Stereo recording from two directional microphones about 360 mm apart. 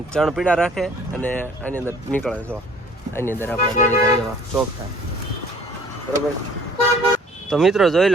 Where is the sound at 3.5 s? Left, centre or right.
Centre.